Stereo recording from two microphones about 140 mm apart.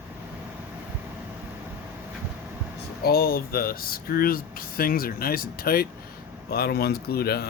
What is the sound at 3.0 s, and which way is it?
Speech, 90° left.